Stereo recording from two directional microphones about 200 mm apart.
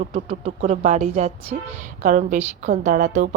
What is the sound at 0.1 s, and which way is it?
A woman's voice, 30° right (ahead or behind).